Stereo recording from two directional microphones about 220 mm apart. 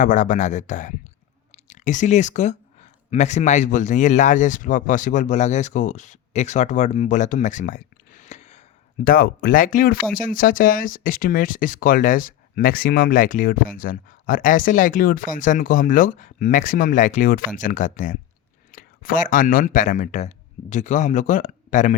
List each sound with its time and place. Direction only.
0.0 s speech: 35° left (ahead or behind)
9.0 s speech: 40° left (ahead or behind)